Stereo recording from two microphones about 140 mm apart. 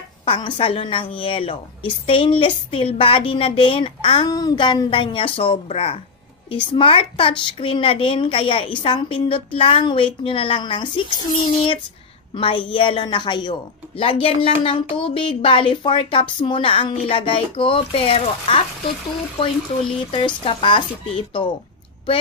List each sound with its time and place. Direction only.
0.2 s a woman's voice: 35° left (ahead or behind)
20.1 s a woman's voice: 40° left (ahead or behind)